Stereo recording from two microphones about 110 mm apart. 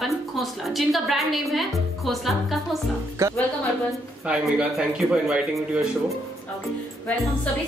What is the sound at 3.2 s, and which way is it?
Speech, 25° right (ahead or behind).